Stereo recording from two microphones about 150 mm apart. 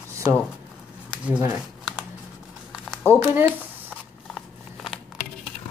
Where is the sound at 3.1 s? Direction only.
10° right (ahead or behind).